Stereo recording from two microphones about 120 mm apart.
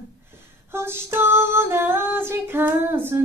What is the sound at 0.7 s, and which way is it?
Female singing, 20° right (ahead or behind).